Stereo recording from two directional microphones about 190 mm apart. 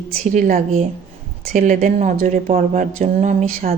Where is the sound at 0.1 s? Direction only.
45° right (ahead or behind).